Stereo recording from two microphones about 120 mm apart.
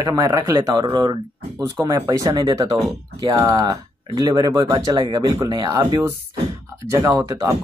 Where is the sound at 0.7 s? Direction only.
40° right (ahead or behind).